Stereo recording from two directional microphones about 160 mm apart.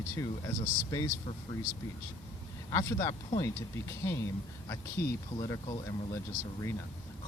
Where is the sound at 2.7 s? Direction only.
20° left (ahead or behind).